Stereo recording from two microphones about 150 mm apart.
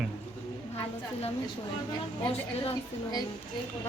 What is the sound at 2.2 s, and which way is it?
Speech, 35° left (ahead or behind).